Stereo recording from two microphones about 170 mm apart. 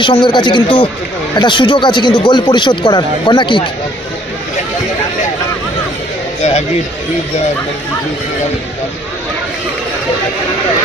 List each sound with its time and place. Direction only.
0.0 s speech: 30° left (ahead or behind)